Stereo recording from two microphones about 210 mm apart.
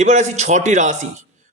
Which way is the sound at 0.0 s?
35° right (ahead or behind).